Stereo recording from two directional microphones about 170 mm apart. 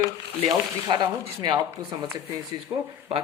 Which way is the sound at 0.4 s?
25° right (ahead or behind).